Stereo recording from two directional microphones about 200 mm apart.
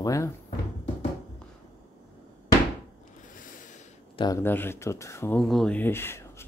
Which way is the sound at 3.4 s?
40° left (ahead or behind).